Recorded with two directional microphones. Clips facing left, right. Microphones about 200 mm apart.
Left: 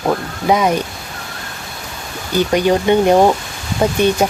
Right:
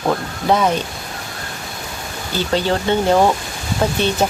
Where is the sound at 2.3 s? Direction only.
15° left (ahead or behind).